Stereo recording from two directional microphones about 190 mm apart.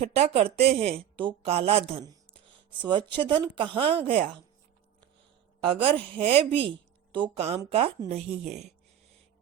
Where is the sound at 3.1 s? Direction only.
25° right (ahead or behind).